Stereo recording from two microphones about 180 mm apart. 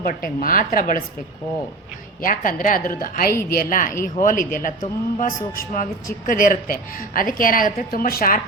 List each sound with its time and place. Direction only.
0.0 s a man's voice: 50° left (ahead or behind)
2.2 s a man's voice: 50° left (ahead or behind)